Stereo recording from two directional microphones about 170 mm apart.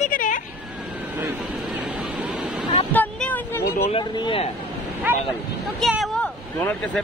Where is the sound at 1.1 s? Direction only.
10° right (ahead or behind).